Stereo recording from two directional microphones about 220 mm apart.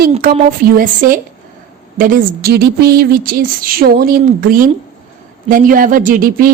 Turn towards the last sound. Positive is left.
turn(degrees=-40)  # may be behind; listen again after turning